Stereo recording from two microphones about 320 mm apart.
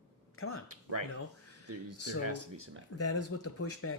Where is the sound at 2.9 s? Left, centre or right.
Left.